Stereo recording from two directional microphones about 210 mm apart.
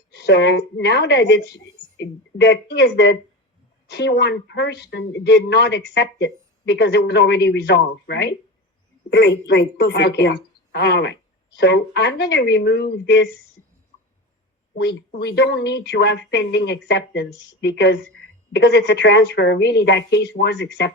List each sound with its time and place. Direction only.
0.1 s a woman's voice: 55° left (ahead or behind)
14.8 s a woman's voice: 55° left (ahead or behind)